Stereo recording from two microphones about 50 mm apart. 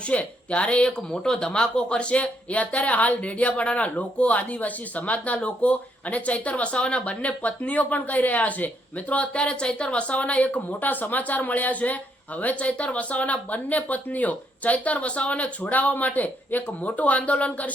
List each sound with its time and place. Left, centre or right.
0.0 s speech: left